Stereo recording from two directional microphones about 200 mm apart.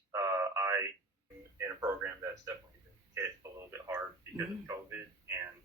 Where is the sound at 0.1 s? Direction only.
15° right (ahead or behind).